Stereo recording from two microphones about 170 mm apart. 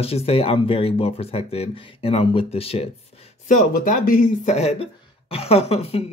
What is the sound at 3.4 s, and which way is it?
A man's voice, 50° left (ahead or behind).